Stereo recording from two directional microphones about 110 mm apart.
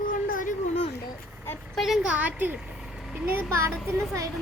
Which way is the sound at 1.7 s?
Centre (ahead or behind).